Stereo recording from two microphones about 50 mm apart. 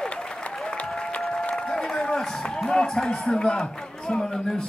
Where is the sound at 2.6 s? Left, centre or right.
Centre.